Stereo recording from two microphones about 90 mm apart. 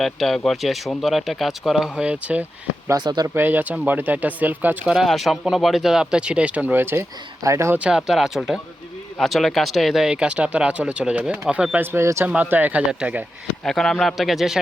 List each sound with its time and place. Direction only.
0.0 s speech: centre (ahead or behind); by 2.4 s 15° right (ahead or behind)
3.0 s speech: 55° right (ahead or behind)
3.3 s speech: 20° right (ahead or behind)
4.9 s speech: centre (ahead or behind); by 7.8 s 30° right (ahead or behind)
7.8 s speech: 10° right (ahead or behind)
13.7 s speech: 5° left (ahead or behind)